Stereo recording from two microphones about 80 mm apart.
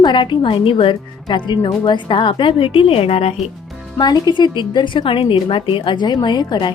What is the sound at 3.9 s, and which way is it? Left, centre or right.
A woman's voice, left.